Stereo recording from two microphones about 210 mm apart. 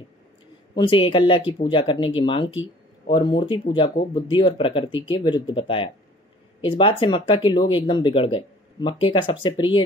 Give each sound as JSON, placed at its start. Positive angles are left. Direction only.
{"t": 0.7, "sound": "speech", "side_deg": 20}